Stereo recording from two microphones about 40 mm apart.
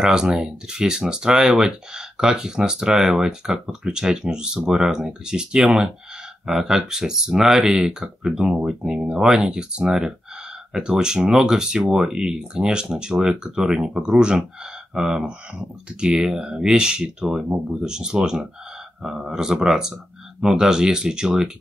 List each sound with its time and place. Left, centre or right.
0.0 s speech: centre